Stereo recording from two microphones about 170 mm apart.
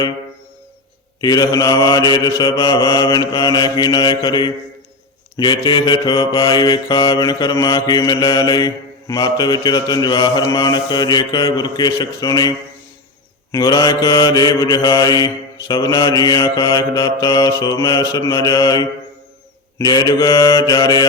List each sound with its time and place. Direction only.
1.2 s mantra: 25° left (ahead or behind)